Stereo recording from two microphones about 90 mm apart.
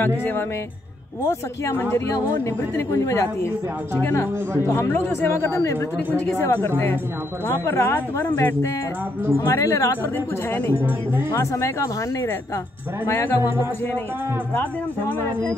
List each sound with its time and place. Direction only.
1.2 s speech: 25° left (ahead or behind)
11.5 s speech: 35° left (ahead or behind)
14.5 s speech: 20° left (ahead or behind)